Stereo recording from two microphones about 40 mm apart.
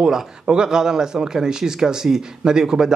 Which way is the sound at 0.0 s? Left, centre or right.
Centre.